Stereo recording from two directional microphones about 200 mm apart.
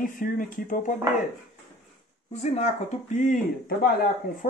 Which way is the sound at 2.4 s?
35° left (ahead or behind).